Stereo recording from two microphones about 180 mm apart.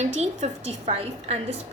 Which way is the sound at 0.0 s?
40° right (ahead or behind).